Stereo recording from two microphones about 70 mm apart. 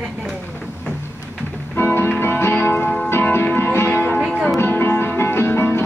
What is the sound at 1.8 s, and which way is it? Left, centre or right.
Music, left.